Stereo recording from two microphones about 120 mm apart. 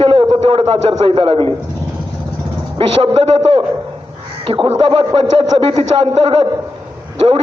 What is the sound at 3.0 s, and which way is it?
A man's voice, 50° right (ahead or behind).